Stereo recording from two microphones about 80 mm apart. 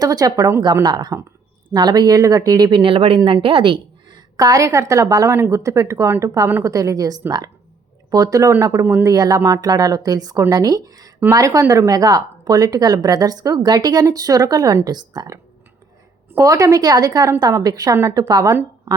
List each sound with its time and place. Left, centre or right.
0.0 s speech: right
4.4 s a woman's voice: right
5.3 s a woman's voice: right
8.8 s speech: right
9.0 s a woman's voice: right
16.4 s a woman's voice: right